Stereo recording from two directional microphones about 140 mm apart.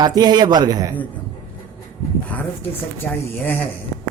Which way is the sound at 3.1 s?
5° left (ahead or behind).